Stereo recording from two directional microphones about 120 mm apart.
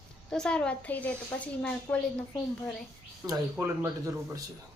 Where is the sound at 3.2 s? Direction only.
30° right (ahead or behind).